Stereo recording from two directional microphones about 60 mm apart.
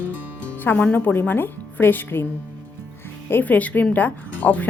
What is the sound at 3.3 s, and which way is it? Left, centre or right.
Speech, left.